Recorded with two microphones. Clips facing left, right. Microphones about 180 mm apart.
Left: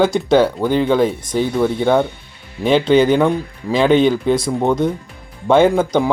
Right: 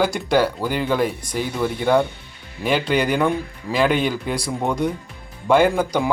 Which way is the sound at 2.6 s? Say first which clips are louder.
Left 7 dB; 25° left (ahead or behind).